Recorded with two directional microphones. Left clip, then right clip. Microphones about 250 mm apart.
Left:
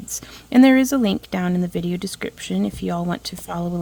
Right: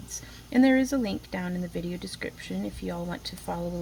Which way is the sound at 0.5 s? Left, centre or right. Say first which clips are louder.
Left 8 dB; left.